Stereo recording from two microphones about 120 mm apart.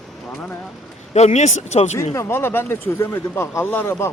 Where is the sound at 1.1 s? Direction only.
70° left (ahead or behind).